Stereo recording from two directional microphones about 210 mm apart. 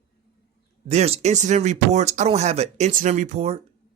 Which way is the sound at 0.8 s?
30° right (ahead or behind).